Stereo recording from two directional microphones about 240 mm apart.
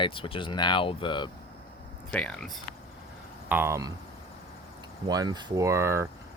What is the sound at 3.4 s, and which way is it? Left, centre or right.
Speech, centre.